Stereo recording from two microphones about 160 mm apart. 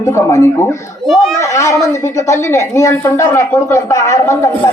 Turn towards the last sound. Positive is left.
turn(degrees=20)  # may be behind; listen again after turning